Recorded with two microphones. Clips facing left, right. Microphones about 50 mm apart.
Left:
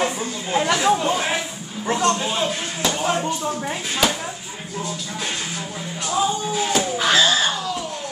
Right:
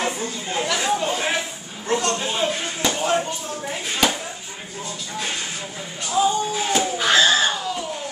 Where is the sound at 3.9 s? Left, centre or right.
Centre.